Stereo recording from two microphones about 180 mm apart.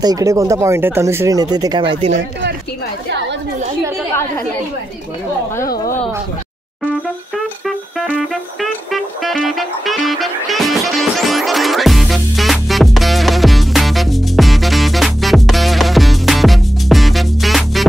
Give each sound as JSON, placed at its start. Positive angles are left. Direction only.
{"t": 0.0, "sound": "speech", "side_deg": -20}
{"t": 8.5, "sound": "music", "side_deg": 0}